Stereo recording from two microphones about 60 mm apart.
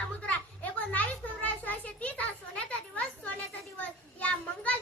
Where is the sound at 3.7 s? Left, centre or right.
Left.